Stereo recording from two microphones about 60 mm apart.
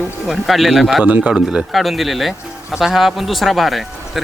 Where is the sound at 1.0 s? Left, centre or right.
Right.